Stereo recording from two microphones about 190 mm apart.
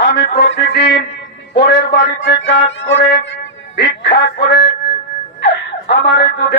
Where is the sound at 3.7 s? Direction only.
55° left (ahead or behind).